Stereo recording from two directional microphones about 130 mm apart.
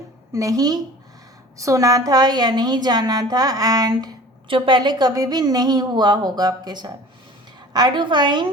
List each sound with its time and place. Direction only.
0.3 s a woman's voice: 25° right (ahead or behind)